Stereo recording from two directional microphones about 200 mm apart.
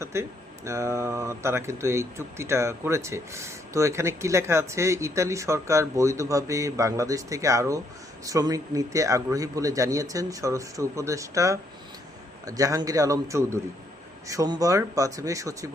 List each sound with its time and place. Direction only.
0.0 s speech: 15° right (ahead or behind)